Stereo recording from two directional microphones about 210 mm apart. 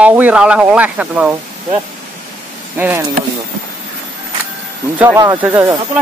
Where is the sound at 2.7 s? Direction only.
10° right (ahead or behind).